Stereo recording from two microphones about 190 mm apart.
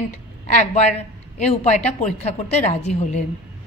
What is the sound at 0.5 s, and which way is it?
A woman's voice, 40° left (ahead or behind).